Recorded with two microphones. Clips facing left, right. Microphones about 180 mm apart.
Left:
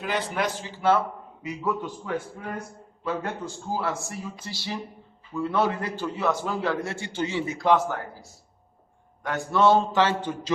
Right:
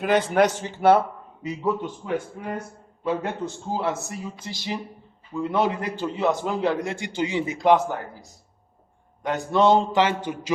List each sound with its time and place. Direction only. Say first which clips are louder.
0.0 s speech: right 8 dB; 60° right (ahead or behind)
0.9 s speech: right 4 dB; 30° right (ahead or behind)
3.0 s a man's voice: right 4 dB; 20° right (ahead or behind)